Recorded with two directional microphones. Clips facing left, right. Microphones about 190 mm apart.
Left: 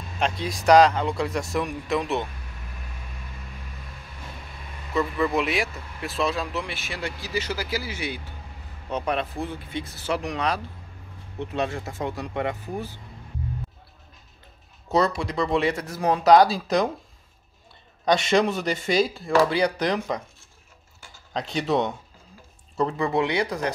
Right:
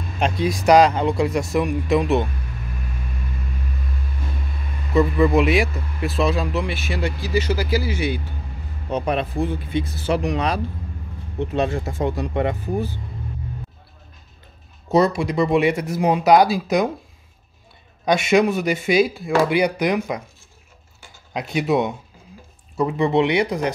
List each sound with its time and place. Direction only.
0.2 s a man's voice: 10° right (ahead or behind)
4.9 s a man's voice: 15° right (ahead or behind)
11.3 s speech: 30° right (ahead or behind)
14.9 s a man's voice: 10° right (ahead or behind)
18.0 s a man's voice: 10° right (ahead or behind)
21.3 s a man's voice: 10° right (ahead or behind)
22.9 s speech: 20° right (ahead or behind)